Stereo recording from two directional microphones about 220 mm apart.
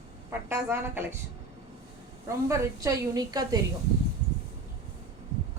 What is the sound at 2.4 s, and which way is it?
A woman's voice, 15° right (ahead or behind).